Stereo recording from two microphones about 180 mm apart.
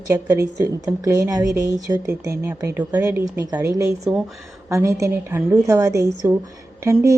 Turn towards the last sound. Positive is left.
turn(degrees=-15)  # may be behind; listen again after turning